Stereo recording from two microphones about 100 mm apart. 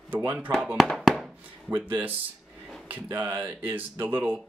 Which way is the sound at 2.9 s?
20° right (ahead or behind).